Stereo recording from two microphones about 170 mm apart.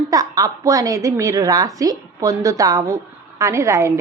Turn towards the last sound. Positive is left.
turn(degrees=-15)  # may be behind; listen again after turning